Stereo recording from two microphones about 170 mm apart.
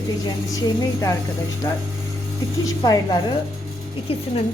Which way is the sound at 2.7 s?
20° left (ahead or behind).